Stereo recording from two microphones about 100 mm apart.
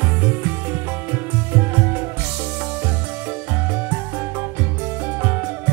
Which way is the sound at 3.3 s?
20° right (ahead or behind).